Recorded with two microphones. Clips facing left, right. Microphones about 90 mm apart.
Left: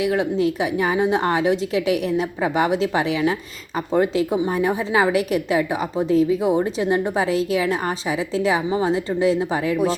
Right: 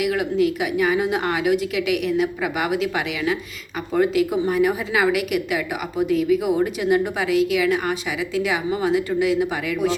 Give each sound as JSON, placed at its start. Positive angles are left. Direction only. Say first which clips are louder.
{"t": 0.0, "sound": "a woman's voice", "louder": "even", "side_deg": 30}